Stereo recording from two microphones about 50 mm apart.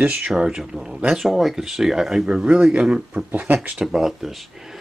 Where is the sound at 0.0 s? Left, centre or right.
Right.